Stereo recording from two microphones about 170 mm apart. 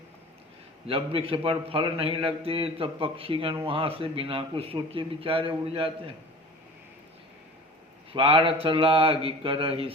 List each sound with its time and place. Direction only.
0.9 s a man's voice: 35° right (ahead or behind)
8.1 s a man's voice: 30° right (ahead or behind)